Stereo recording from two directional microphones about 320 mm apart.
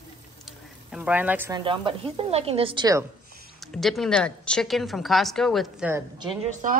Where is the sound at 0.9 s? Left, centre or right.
Centre.